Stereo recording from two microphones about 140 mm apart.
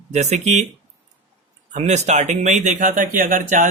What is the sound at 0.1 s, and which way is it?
Speech, 55° right (ahead or behind).